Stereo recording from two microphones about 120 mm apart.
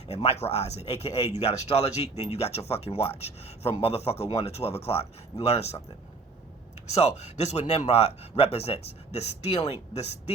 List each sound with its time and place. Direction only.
0.1 s speech: 60° left (ahead or behind)
7.0 s speech: 70° left (ahead or behind)